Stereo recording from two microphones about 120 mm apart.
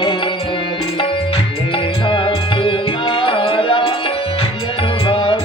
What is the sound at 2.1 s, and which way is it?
Music, 45° left (ahead or behind).